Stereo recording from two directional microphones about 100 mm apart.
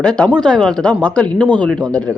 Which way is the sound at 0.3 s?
5° left (ahead or behind).